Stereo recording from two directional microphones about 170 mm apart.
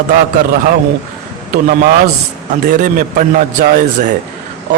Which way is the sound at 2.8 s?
50° right (ahead or behind).